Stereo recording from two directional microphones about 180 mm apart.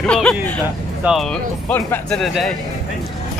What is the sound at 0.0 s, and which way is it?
Speech, 5° left (ahead or behind).